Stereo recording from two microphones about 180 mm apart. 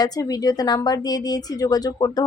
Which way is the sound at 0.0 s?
20° left (ahead or behind).